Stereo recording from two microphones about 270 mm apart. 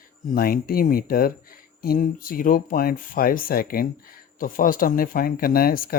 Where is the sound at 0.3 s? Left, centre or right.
Left.